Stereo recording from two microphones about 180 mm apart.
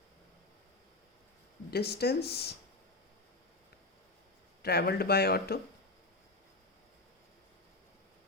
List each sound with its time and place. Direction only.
1.7 s speech: 60° left (ahead or behind)
4.6 s speech: 60° left (ahead or behind)